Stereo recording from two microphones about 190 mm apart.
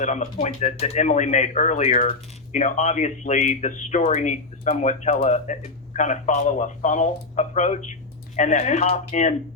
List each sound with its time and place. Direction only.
0.0 s speech: 40° left (ahead or behind)